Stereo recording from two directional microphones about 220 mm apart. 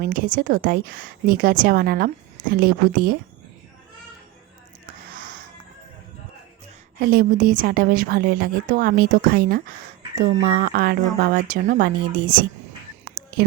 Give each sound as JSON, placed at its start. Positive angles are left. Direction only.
{"t": 0.0, "sound": "a woman's voice", "side_deg": -40}
{"t": 7.1, "sound": "a woman's voice", "side_deg": -40}